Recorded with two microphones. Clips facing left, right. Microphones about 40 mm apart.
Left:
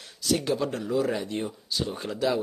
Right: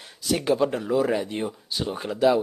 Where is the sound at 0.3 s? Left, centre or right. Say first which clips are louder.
Right 4 dB; centre.